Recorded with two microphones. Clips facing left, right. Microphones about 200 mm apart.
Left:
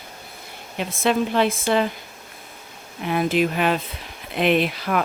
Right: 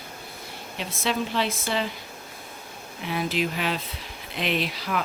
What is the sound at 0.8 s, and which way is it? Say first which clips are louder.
Speech: left 7 dB; 50° left (ahead or behind).